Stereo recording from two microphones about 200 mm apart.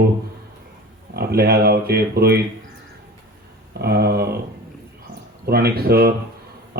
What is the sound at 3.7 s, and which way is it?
Speech, 50° right (ahead or behind).